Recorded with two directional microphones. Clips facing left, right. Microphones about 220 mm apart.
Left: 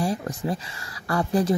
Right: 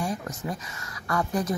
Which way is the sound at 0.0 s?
30° left (ahead or behind).